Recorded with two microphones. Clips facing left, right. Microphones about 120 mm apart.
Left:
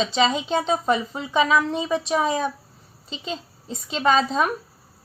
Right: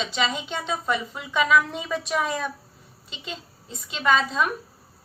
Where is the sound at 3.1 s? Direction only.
35° left (ahead or behind).